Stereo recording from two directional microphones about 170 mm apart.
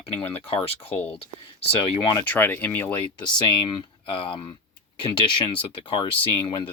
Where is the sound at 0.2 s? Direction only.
35° left (ahead or behind).